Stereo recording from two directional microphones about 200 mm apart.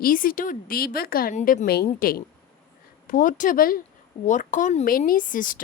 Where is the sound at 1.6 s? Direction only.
50° left (ahead or behind).